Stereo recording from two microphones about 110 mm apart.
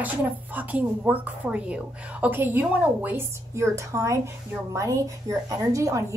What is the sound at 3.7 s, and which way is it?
A woman's voice, 30° right (ahead or behind).